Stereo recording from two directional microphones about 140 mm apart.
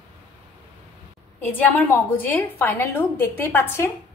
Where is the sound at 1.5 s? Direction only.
10° left (ahead or behind).